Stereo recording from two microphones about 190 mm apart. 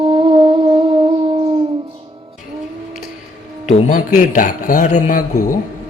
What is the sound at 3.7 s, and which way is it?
A man's voice, 45° left (ahead or behind).